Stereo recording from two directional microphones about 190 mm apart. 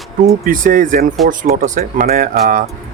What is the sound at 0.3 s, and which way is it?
Speech, 45° right (ahead or behind).